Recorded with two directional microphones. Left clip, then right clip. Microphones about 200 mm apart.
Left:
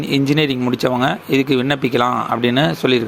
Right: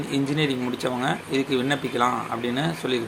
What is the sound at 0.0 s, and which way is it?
Speech, 40° left (ahead or behind).